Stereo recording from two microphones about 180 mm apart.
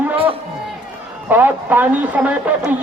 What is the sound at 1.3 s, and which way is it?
Speech, 10° right (ahead or behind).